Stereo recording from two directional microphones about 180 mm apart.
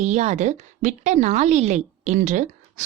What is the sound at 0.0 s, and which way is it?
A woman's voice, 40° right (ahead or behind).